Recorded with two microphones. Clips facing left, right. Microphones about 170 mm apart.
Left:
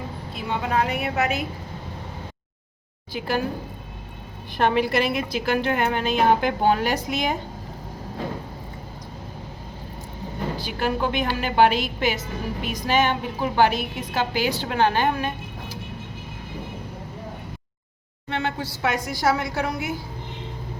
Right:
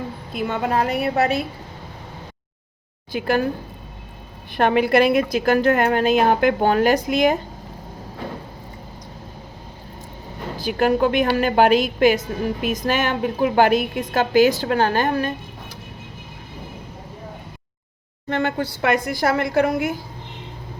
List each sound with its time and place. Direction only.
0.3 s a woman's voice: 45° right (ahead or behind)
3.1 s a woman's voice: 50° right (ahead or behind)
4.5 s a woman's voice: 55° right (ahead or behind)
10.6 s a woman's voice: 50° right (ahead or behind)
18.3 s a woman's voice: 50° right (ahead or behind)